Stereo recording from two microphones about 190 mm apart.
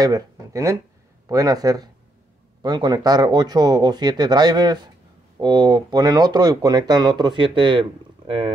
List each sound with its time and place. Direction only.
0.0 s speech: 20° right (ahead or behind)